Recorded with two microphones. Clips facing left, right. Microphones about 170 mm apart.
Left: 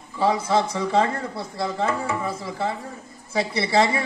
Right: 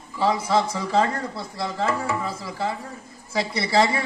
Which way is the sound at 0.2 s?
30° left (ahead or behind).